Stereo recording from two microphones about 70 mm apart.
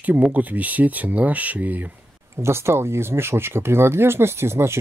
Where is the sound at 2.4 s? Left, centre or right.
Right.